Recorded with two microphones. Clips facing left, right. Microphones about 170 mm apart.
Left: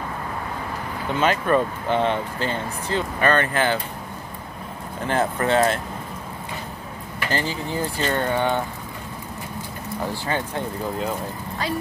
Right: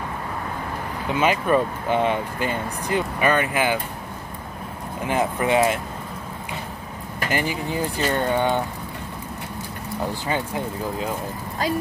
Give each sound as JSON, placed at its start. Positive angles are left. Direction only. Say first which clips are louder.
{"t": 1.1, "sound": "speech", "louder": "even", "side_deg": -10}
{"t": 5.0, "sound": "speech", "louder": "even", "side_deg": -10}
{"t": 7.2, "sound": "speech", "louder": "right 1 dB", "side_deg": -15}
{"t": 10.2, "sound": "speech", "louder": "even", "side_deg": -10}